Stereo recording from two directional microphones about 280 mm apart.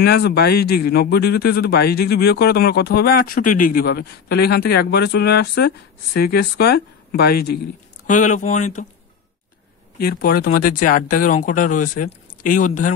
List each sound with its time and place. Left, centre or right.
0.0 s a man's voice: left
9.9 s speech: left